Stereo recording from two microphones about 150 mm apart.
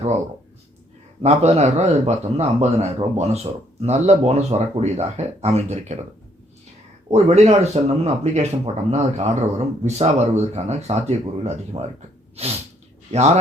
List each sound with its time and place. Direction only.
1.2 s speech: 45° right (ahead or behind)
7.1 s a man's voice: 45° right (ahead or behind)